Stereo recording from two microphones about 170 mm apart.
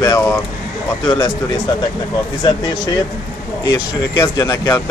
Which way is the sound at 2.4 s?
25° left (ahead or behind).